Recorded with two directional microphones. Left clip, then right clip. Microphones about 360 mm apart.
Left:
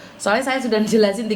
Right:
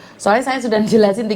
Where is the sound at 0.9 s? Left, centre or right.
Right.